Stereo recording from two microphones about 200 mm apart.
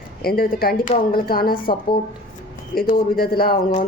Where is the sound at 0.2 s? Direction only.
50° left (ahead or behind).